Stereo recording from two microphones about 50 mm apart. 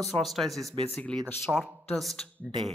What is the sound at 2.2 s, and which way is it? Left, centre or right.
Speech, centre.